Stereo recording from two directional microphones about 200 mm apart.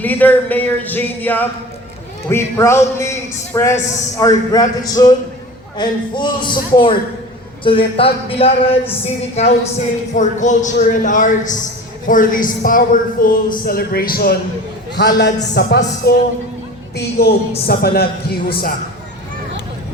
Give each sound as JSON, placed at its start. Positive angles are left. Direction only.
{"t": 0.0, "sound": "a man's voice", "side_deg": 10}